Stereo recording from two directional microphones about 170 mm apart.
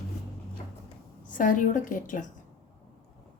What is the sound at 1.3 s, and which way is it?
Speech, 50° left (ahead or behind).